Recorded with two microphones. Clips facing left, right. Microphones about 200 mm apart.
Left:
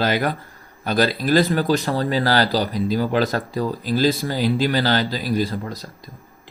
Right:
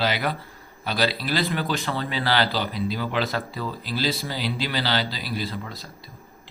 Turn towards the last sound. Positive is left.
turn(degrees=45)  # may be behind; listen again after turning